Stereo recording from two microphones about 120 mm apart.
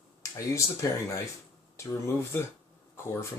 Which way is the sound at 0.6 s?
25° left (ahead or behind).